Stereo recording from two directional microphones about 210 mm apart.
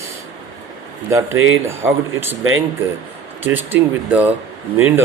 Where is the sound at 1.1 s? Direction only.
15° right (ahead or behind).